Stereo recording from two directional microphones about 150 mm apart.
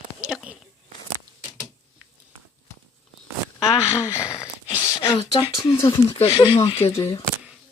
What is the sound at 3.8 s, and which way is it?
Speech, 15° left (ahead or behind).